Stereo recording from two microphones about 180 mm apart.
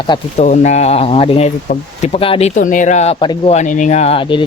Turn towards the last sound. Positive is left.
turn(degrees=30)  # may be behind; listen again after turning